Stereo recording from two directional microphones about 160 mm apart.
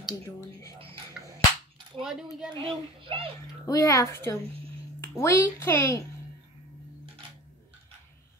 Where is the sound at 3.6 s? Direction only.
20° left (ahead or behind).